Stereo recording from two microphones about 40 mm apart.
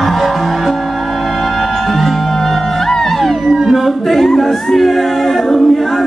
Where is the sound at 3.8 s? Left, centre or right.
Centre.